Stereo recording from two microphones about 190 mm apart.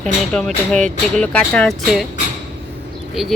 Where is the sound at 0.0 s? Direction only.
5° left (ahead or behind).